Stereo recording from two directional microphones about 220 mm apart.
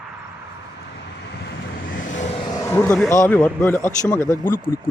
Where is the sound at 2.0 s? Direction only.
35° left (ahead or behind).